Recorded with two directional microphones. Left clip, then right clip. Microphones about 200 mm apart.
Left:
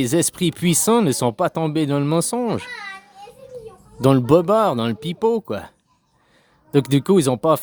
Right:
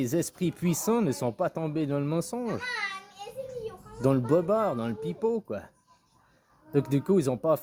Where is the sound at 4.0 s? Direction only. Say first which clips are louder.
Left 10 dB; 40° left (ahead or behind).